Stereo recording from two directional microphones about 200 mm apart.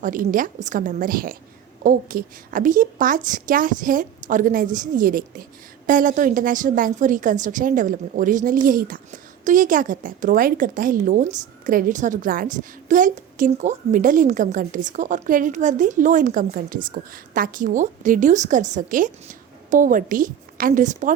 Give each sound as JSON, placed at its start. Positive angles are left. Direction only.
{"t": 0.0, "sound": "a woman's voice", "side_deg": -40}